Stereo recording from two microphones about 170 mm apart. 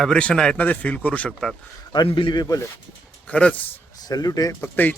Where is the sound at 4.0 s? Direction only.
20° left (ahead or behind).